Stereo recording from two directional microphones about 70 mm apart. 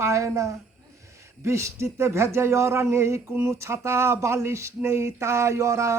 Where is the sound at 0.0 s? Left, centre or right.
Right.